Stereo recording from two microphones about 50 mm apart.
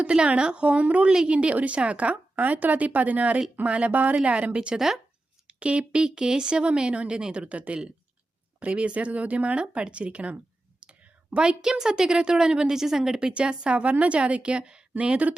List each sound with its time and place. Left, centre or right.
0.0 s speech: right
7.4 s speech: right